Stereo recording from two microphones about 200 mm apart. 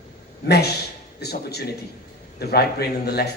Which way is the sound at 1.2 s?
55° left (ahead or behind).